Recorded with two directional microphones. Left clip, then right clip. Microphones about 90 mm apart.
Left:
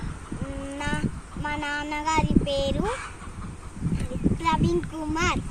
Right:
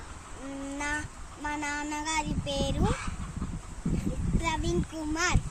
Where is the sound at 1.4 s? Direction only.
45° right (ahead or behind).